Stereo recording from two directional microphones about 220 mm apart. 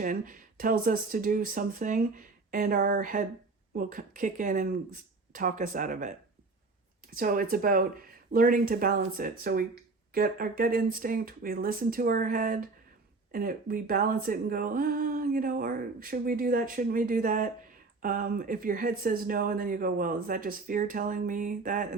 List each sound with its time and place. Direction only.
0.0 s speech: 35° right (ahead or behind)